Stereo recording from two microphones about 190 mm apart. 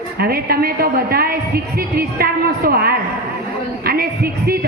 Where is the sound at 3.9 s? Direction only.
55° right (ahead or behind).